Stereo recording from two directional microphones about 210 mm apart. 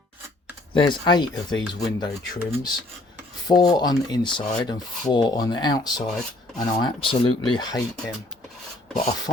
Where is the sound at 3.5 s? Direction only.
20° left (ahead or behind).